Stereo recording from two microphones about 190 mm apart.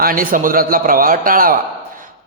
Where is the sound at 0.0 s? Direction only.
45° right (ahead or behind).